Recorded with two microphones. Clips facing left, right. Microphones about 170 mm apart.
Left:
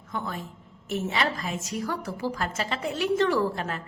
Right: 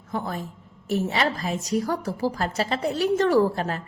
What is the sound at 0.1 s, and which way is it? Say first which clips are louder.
A woman's voice: right 4 dB; 35° right (ahead or behind).